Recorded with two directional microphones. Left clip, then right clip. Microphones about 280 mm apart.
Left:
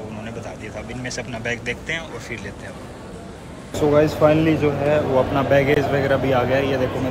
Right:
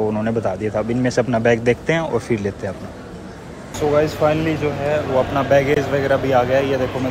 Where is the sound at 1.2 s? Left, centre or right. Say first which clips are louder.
Right 11 dB; right.